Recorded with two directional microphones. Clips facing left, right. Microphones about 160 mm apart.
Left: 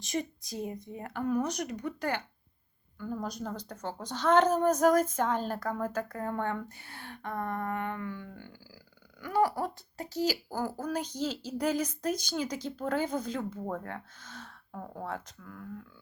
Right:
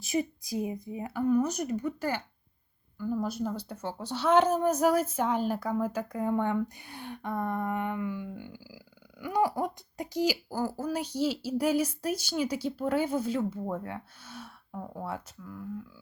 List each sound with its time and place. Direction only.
0.0 s a woman's voice: 10° right (ahead or behind)